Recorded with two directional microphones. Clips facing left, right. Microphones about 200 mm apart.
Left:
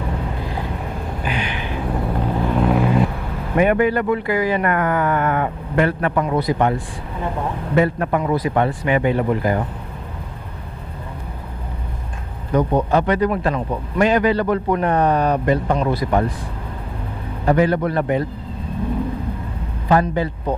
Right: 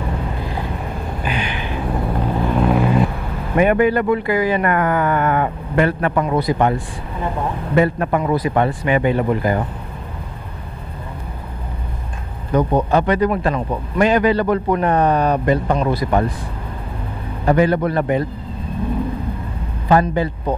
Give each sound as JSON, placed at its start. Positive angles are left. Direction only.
{"t": 1.2, "sound": "a sound", "side_deg": -15}
{"t": 2.0, "sound": "vehicle", "side_deg": -30}
{"t": 3.5, "sound": "speech", "side_deg": -15}
{"t": 7.7, "sound": "speech", "side_deg": -15}
{"t": 12.5, "sound": "speech", "side_deg": -20}
{"t": 17.5, "sound": "speech", "side_deg": -15}
{"t": 19.9, "sound": "speech", "side_deg": -15}